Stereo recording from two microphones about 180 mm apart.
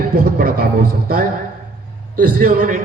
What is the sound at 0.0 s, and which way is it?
A man's voice, 55° right (ahead or behind).